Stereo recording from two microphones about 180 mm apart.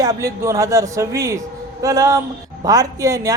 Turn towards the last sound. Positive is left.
turn(degrees=-20)  # may be behind; listen again after turning